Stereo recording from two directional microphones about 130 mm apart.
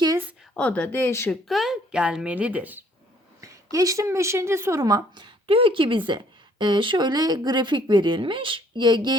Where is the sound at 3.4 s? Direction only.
25° right (ahead or behind).